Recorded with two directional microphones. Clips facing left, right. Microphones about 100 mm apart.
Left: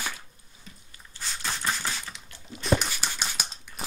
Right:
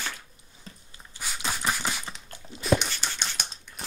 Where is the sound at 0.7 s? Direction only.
35° right (ahead or behind).